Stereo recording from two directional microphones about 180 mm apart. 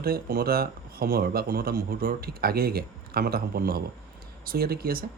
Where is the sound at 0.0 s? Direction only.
55° right (ahead or behind).